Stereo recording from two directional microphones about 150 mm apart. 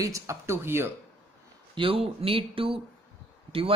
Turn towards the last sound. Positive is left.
turn(degrees=-40)  # may be behind; listen again after turning